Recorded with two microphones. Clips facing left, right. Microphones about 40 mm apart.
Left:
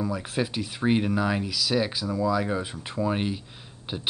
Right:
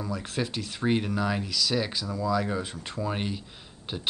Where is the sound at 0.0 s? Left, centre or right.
Centre.